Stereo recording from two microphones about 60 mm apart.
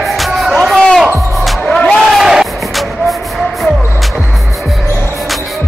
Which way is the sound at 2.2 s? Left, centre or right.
Centre.